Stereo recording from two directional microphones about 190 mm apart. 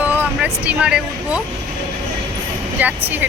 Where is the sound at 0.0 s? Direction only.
10° right (ahead or behind).